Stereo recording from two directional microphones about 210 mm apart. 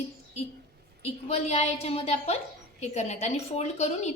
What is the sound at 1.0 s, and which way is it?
A woman's voice, 30° left (ahead or behind).